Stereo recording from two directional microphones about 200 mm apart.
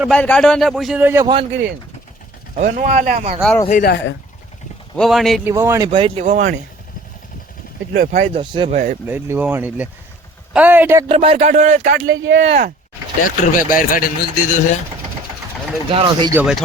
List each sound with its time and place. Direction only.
0.1 s a man's voice: 5° left (ahead or behind); by 1.3 s 10° right (ahead or behind)
2.6 s a man's voice: 40° right (ahead or behind)
3.7 s speech: 45° left (ahead or behind)
4.9 s a man's voice: centre (ahead or behind)
5.5 s speech: 15° right (ahead or behind); by 6.5 s 35° right (ahead or behind)
7.9 s speech: 45° right (ahead or behind)
8.3 s speech: 25° right (ahead or behind)
8.7 s a man's voice: 40° right (ahead or behind)
9.0 s speech: 10° right (ahead or behind)
11.1 s a man's voice: 30° right (ahead or behind)
12.0 s speech: 70° right (ahead or behind)
13.2 s a man's voice: 45° left (ahead or behind)
15.9 s speech: 25° right (ahead or behind)
16.3 s a man's voice: 5° right (ahead or behind)